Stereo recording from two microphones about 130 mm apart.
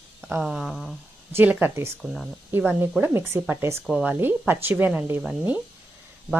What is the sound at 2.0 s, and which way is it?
Speech, centre (ahead or behind).